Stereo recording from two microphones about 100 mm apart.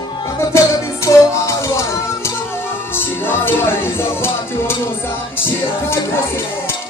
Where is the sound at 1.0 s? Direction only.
30° left (ahead or behind).